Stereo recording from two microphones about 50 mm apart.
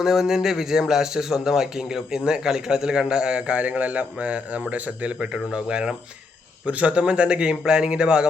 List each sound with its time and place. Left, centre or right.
0.0 s a man's voice: centre